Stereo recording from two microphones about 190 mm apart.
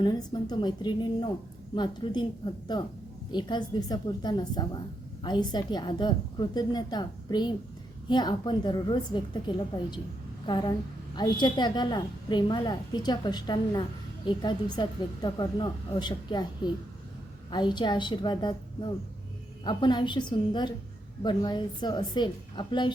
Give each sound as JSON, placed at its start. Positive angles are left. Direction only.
{"t": 0.0, "sound": "a woman's voice", "side_deg": 20}
{"t": 3.3, "sound": "a woman's voice", "side_deg": 20}